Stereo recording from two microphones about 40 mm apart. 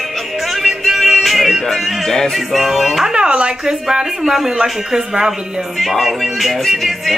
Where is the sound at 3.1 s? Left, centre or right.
Right.